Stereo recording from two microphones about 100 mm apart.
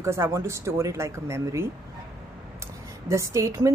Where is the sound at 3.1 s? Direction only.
30° right (ahead or behind).